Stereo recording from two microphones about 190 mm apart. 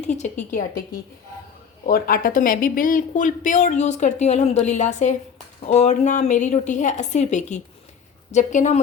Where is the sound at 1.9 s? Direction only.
45° left (ahead or behind).